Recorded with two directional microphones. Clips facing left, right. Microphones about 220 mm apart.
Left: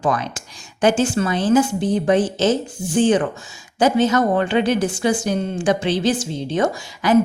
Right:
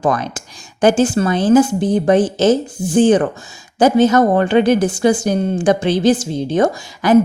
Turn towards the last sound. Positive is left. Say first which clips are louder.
# right 4 dB
turn(degrees=-40)  # may be behind; listen again after turning